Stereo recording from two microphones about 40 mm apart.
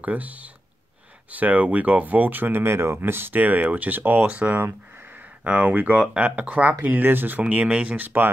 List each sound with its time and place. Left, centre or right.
0.0 s speech: right
2.6 s speech: right
3.3 s speech: right
5.4 s speech: right
5.9 s speech: right
6.5 s speech: right
7.9 s speech: right